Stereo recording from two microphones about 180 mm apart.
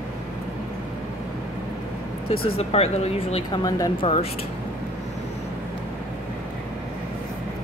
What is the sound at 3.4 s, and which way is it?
Speech, 20° left (ahead or behind).